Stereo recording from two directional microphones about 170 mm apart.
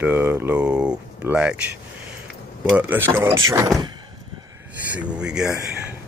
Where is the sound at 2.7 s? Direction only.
10° right (ahead or behind).